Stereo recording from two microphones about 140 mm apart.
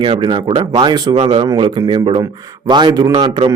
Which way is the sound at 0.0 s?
35° right (ahead or behind).